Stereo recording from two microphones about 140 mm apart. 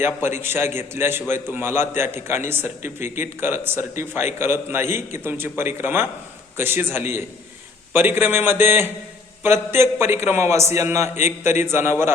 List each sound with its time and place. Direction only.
0.0 s a man's voice: 15° right (ahead or behind)